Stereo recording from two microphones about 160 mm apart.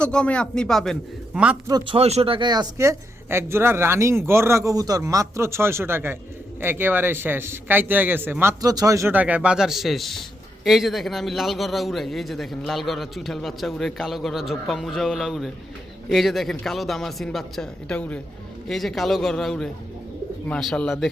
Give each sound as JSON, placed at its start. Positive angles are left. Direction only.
{"t": 0.0, "sound": "a man's voice", "side_deg": 5}
{"t": 1.6, "sound": "speech", "side_deg": -25}
{"t": 2.0, "sound": "a man's voice", "side_deg": -40}